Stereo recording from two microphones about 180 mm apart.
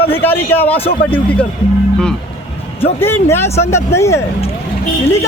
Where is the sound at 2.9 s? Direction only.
10° left (ahead or behind).